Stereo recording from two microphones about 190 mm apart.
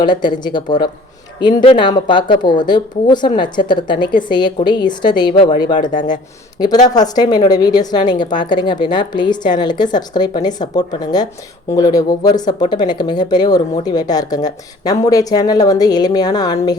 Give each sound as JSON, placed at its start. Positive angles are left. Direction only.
{"t": 0.0, "sound": "speech", "side_deg": 25}